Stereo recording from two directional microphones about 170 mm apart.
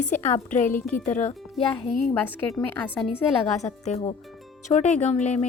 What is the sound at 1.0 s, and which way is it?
Speech, 45° left (ahead or behind).